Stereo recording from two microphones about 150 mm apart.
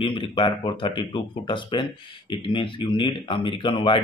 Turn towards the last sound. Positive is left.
turn(degrees=35)  # may be behind; listen again after turning